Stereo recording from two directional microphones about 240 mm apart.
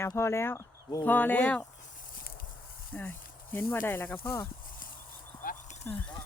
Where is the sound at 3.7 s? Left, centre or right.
Centre.